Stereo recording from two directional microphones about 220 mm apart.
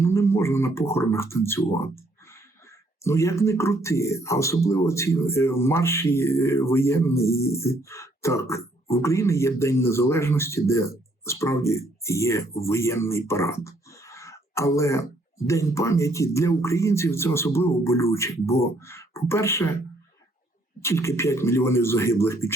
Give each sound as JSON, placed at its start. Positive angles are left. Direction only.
{"t": 0.0, "sound": "speech", "side_deg": 10}
{"t": 3.0, "sound": "speech", "side_deg": 15}
{"t": 20.8, "sound": "speech", "side_deg": 10}